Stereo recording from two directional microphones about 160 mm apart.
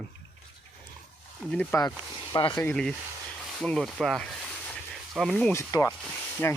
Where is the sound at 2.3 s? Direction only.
30° left (ahead or behind).